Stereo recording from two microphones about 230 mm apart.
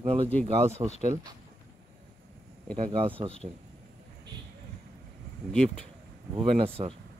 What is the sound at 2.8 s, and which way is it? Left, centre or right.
Speech, right.